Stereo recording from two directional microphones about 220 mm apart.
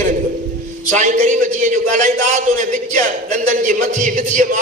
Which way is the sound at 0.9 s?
35° right (ahead or behind).